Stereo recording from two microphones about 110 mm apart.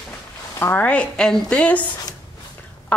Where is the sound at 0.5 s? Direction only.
20° left (ahead or behind).